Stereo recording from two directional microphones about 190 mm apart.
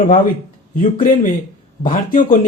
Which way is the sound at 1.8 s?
45° left (ahead or behind).